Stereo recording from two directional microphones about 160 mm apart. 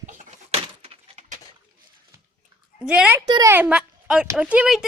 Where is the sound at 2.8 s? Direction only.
5° right (ahead or behind).